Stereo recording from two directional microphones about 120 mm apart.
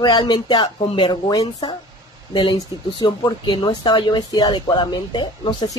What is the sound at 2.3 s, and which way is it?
Speech, 40° left (ahead or behind).